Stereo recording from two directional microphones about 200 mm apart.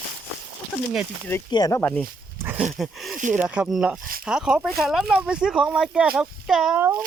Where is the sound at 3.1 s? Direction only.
40° right (ahead or behind).